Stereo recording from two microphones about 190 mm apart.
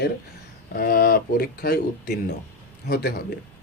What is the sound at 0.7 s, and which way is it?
Speech, 50° left (ahead or behind).